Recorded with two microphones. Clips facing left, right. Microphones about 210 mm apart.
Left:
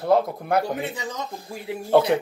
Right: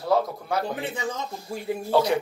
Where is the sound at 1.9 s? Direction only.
55° left (ahead or behind).